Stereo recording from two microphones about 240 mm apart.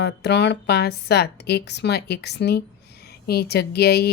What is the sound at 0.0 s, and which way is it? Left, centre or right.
Speech, left.